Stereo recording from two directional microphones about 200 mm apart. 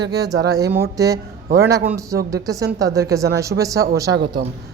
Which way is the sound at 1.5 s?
50° right (ahead or behind).